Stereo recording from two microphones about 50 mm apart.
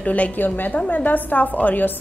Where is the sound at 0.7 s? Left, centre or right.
Left.